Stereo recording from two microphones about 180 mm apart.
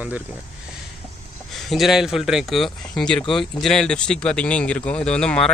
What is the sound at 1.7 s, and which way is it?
Speech, centre (ahead or behind).